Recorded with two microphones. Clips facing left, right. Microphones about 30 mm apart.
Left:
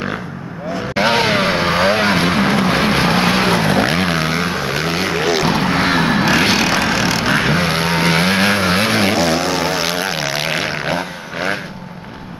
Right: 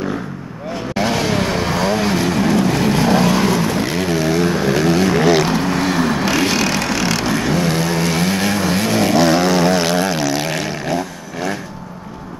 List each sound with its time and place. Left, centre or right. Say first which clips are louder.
0.9 s vehicle: left 4 dB; left; by 5.5 s centre
5.5 s vehicle: left 2 dB; left
7.2 s vehicle: left 2 dB; left
9.1 s vehicle: right 3 dB; centre; by 11.5 s left